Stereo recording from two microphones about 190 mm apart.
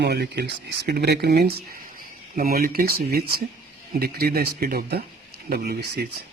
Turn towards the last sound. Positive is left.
turn(degrees=-60)  # may be behind; listen again after turning